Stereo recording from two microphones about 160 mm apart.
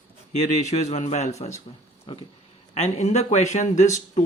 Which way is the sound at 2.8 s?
45° left (ahead or behind).